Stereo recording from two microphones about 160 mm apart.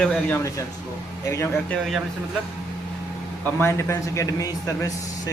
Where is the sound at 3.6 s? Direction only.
15° left (ahead or behind).